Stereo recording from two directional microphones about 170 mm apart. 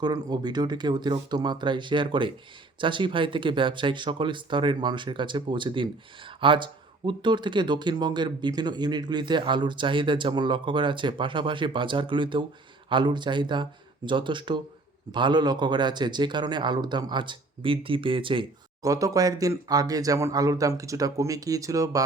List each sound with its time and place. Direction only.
0.0 s speech: 25° right (ahead or behind)